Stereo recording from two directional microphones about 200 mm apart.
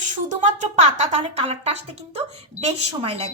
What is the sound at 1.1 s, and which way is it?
A woman's voice, 30° right (ahead or behind).